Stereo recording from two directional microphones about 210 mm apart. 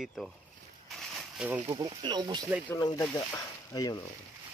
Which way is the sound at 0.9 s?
Centre (ahead or behind).